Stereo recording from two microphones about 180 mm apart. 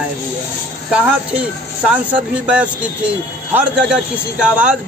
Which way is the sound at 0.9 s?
5° right (ahead or behind).